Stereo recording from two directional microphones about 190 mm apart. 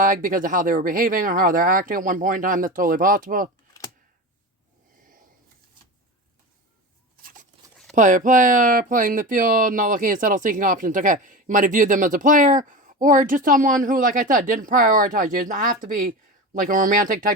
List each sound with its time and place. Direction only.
0.0 s speech: 45° right (ahead or behind)
7.9 s speech: 45° right (ahead or behind)